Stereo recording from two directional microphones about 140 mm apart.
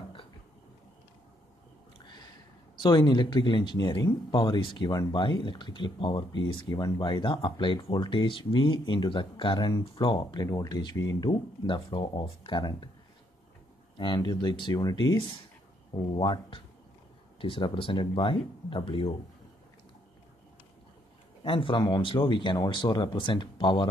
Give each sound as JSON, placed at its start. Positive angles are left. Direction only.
{"t": 2.0, "sound": "a sound", "side_deg": 35}
{"t": 2.8, "sound": "speech", "side_deg": 35}
{"t": 13.9, "sound": "speech", "side_deg": 35}
{"t": 21.5, "sound": "speech", "side_deg": 40}